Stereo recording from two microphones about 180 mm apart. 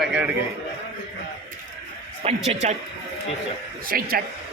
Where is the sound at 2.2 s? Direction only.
35° right (ahead or behind).